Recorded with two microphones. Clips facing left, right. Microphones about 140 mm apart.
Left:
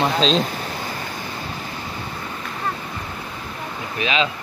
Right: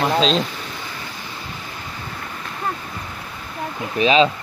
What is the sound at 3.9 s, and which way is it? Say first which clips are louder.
Speech: right 7 dB; 35° right (ahead or behind).